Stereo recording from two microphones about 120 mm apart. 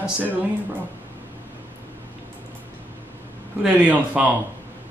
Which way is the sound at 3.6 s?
10° right (ahead or behind).